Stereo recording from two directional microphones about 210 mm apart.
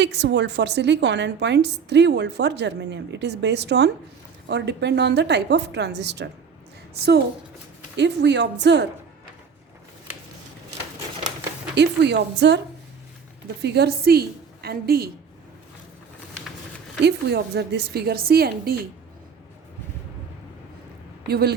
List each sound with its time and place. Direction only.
0.0 s a woman's voice: 55° right (ahead or behind)
7.9 s a woman's voice: 55° right (ahead or behind)
11.7 s a woman's voice: 55° right (ahead or behind)
13.6 s a woman's voice: 50° right (ahead or behind)
17.0 s a woman's voice: 50° right (ahead or behind)
21.2 s speech: 50° right (ahead or behind)